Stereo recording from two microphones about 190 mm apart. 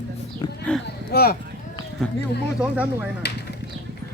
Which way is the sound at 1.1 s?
55° left (ahead or behind).